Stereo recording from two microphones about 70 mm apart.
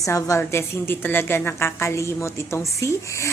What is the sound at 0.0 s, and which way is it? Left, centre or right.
A woman's voice, left.